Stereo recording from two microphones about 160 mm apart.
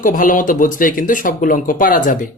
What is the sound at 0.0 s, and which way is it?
Speech, 55° left (ahead or behind).